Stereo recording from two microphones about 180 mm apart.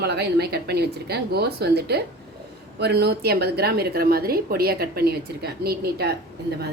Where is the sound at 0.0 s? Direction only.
65° right (ahead or behind).